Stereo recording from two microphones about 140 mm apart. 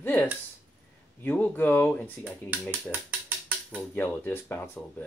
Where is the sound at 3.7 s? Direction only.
15° left (ahead or behind).